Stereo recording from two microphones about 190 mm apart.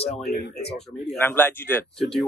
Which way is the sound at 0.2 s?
60° left (ahead or behind).